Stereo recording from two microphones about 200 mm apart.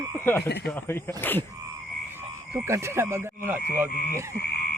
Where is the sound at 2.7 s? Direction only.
15° right (ahead or behind).